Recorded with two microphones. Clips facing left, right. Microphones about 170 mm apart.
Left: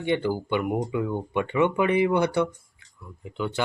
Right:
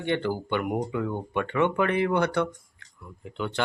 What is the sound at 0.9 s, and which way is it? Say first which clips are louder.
Speech: left 2 dB; 10° left (ahead or behind).